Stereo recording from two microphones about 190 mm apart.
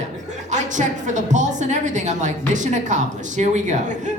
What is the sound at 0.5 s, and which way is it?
Speech, 40° right (ahead or behind).